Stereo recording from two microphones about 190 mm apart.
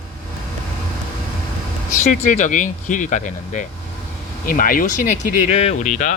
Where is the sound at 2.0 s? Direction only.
40° left (ahead or behind).